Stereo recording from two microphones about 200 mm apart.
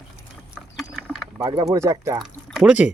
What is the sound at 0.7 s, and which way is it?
Ratchet, centre (ahead or behind).